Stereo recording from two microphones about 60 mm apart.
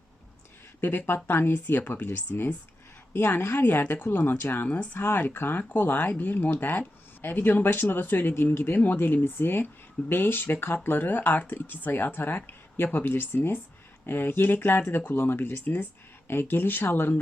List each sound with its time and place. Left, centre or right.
0.8 s speech: left